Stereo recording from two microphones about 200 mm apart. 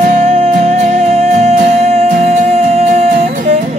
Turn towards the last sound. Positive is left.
turn(degrees=-40)  # may be behind; listen again after turning